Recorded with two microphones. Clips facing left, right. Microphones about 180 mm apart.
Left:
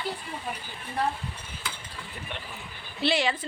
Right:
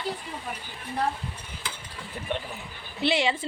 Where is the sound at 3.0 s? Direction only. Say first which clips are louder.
Right 1 dB; 20° right (ahead or behind).